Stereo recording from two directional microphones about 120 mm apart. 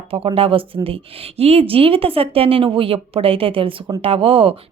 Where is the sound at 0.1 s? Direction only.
50° right (ahead or behind).